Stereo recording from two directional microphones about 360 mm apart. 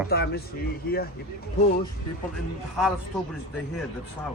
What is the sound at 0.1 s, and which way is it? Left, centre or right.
Speech, left.